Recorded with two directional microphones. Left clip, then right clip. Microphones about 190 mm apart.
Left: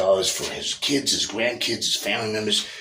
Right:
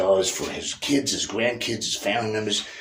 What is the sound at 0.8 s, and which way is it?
Speech, 10° right (ahead or behind).